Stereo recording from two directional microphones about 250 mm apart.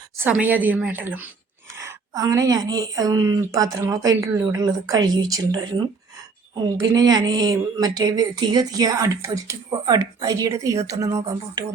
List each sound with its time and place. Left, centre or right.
0.2 s speech: centre